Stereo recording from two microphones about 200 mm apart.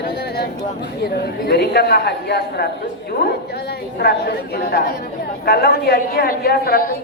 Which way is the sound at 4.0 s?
55° left (ahead or behind).